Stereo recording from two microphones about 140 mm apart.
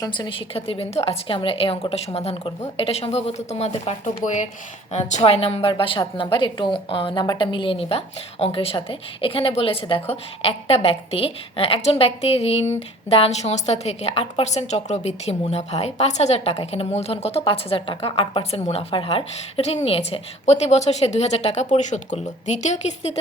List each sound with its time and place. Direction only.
0.0 s a woman's voice: 35° left (ahead or behind); by 3.9 s 50° left (ahead or behind)
4.0 s speech: 65° left (ahead or behind)
4.9 s a woman's voice: 55° left (ahead or behind)